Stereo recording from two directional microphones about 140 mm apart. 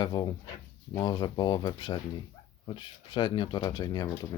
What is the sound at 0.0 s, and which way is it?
Speech, 30° left (ahead or behind).